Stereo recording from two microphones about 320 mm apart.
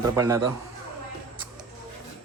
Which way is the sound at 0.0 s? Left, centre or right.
Centre.